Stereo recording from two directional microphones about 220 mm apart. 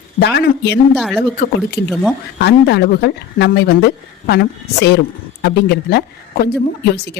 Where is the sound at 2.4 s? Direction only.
50° left (ahead or behind).